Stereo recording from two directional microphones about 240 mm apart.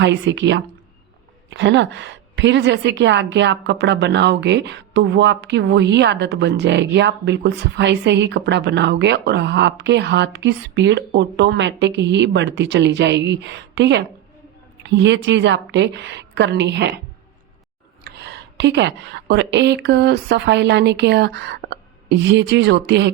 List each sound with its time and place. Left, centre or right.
0.0 s a woman's voice: right
18.0 s a woman's voice: right